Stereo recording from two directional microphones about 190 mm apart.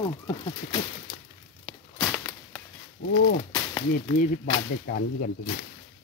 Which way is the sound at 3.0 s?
65° left (ahead or behind).